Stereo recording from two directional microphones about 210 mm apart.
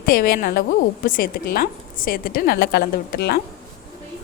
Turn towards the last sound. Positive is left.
turn(degrees=50)  # may be behind; listen again after turning